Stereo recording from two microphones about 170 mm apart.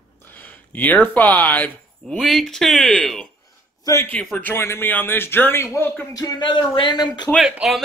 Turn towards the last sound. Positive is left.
turn(degrees=0)  # may be behind; listen again after turning